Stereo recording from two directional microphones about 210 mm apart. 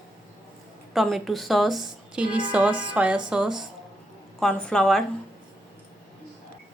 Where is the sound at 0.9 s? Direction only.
Centre (ahead or behind).